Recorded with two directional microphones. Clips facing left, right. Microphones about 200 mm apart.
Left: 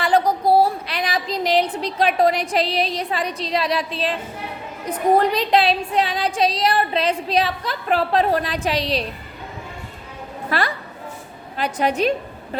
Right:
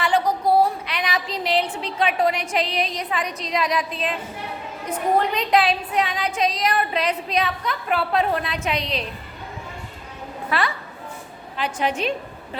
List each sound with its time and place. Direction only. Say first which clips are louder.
0.0 s a woman's voice: left 3 dB; 35° left (ahead or behind)
10.5 s a sound: left 1 dB; 40° left (ahead or behind)
11.5 s a woman's voice: left 3 dB; 40° left (ahead or behind)